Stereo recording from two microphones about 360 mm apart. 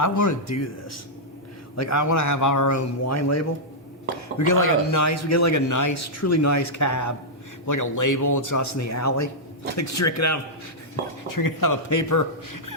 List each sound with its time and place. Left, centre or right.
0.0 s speech: left
4.4 s speech: left
11.3 s a man's voice: left